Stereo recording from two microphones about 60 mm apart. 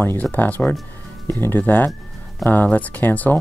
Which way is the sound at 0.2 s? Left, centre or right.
Left.